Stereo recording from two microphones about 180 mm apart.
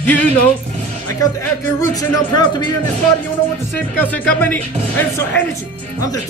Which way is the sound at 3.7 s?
10° left (ahead or behind).